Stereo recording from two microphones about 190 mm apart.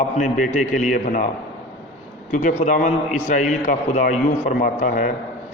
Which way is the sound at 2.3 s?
45° left (ahead or behind).